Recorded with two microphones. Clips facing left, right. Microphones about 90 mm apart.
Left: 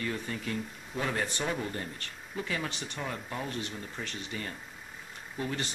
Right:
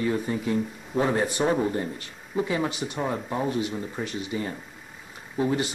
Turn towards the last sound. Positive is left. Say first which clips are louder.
# right 9 dB
turn(degrees=-15)  # may be behind; listen again after turning